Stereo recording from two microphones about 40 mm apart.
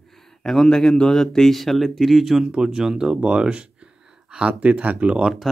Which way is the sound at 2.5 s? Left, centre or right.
Centre.